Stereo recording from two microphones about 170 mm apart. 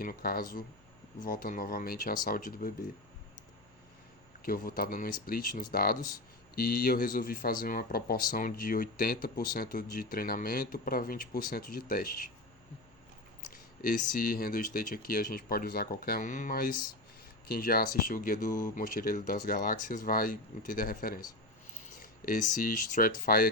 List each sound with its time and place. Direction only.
0.0 s speech: 60° left (ahead or behind)
4.4 s speech: 55° left (ahead or behind)
13.5 s speech: 55° left (ahead or behind)